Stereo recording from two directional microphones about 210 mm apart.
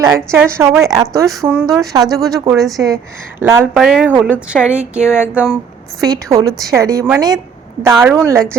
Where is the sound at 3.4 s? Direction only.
10° right (ahead or behind).